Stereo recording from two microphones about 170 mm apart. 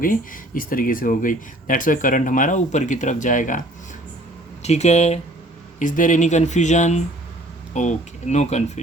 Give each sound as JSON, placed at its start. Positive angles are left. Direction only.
{"t": 0.0, "sound": "speech", "side_deg": 55}
{"t": 4.6, "sound": "speech", "side_deg": 40}